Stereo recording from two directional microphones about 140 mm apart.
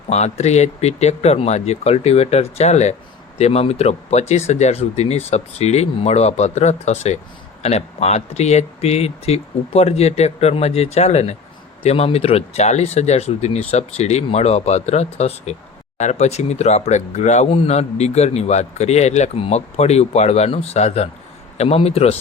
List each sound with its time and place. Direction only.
0.1 s speech: 50° left (ahead or behind)